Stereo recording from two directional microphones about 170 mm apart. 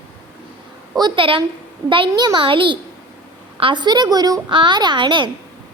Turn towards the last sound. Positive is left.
turn(degrees=-30)  # may be behind; listen again after turning